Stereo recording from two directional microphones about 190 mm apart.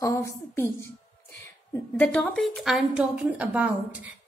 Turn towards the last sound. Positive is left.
turn(degrees=-5)  # may be behind; listen again after turning